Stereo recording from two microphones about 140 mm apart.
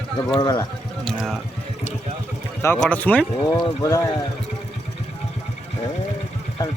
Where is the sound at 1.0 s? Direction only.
5° left (ahead or behind).